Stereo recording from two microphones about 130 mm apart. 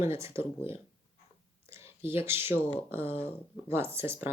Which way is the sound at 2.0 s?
20° right (ahead or behind).